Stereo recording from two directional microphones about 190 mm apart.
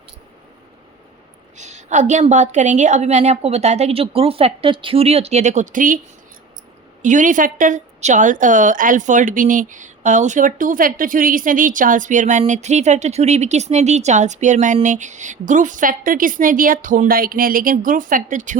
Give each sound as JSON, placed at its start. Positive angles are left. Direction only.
{"t": 1.5, "sound": "a woman's voice", "side_deg": -40}
{"t": 7.0, "sound": "a woman's voice", "side_deg": -40}